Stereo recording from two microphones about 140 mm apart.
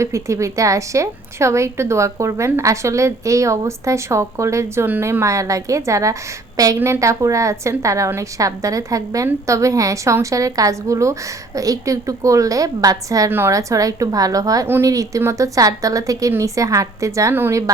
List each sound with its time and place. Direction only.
0.0 s a woman's voice: 20° right (ahead or behind)